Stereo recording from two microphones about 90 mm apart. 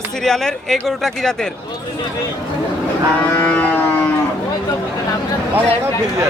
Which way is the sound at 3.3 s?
20° left (ahead or behind).